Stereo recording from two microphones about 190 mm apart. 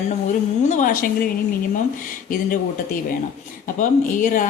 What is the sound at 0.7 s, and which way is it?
Speech, 45° left (ahead or behind).